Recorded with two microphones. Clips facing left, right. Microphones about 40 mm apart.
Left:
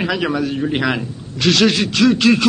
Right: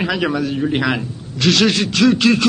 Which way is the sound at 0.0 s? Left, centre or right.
Centre.